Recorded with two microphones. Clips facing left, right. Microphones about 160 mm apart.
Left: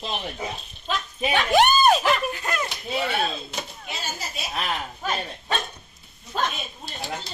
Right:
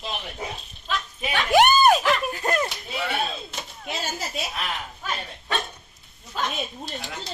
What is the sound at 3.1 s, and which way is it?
Chop, centre (ahead or behind).